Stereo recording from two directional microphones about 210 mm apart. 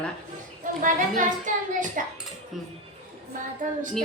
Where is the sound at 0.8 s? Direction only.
35° right (ahead or behind).